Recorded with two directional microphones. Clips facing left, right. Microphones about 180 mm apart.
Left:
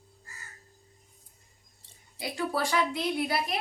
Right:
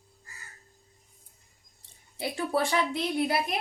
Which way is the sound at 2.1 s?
25° right (ahead or behind).